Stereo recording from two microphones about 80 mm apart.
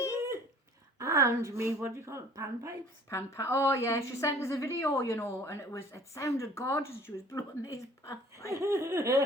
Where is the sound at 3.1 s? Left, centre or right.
Left.